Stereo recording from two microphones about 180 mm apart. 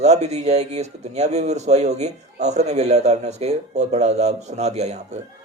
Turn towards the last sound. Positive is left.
turn(degrees=-35)  # may be behind; listen again after turning